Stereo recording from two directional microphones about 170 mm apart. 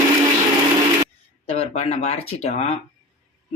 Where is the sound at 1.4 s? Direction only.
35° left (ahead or behind).